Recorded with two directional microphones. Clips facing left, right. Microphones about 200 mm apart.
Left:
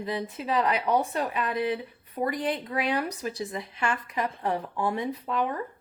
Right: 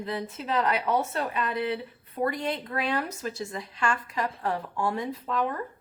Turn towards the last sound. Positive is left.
turn(degrees=15)  # may be behind; listen again after turning